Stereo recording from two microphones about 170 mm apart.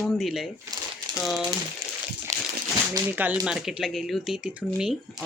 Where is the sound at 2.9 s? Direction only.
10° right (ahead or behind).